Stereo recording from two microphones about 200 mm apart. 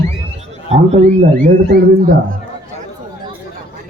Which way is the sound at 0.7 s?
35° right (ahead or behind).